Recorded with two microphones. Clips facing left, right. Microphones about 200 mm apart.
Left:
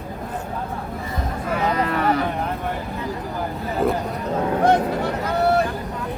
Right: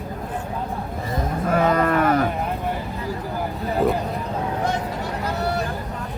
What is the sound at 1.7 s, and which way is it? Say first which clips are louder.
Cattle: right 2 dB; 50° right (ahead or behind).